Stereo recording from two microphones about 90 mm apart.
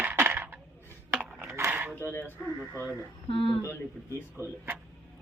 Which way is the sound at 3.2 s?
85° left.